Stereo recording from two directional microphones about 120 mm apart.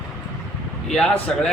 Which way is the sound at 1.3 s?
10° left (ahead or behind).